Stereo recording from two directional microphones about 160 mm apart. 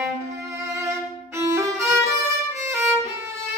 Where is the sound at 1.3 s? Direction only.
20° right (ahead or behind).